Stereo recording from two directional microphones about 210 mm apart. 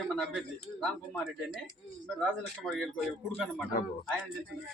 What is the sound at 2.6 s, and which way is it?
Speech, 5° left (ahead or behind).